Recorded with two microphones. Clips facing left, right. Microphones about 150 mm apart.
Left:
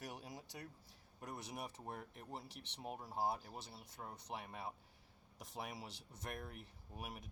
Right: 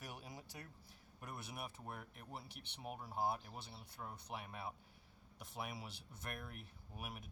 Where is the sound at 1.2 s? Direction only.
40° left (ahead or behind).